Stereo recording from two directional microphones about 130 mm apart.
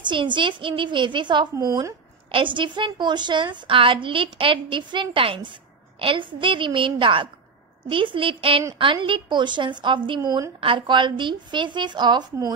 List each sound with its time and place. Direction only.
0.0 s a woman's voice: 35° right (ahead or behind)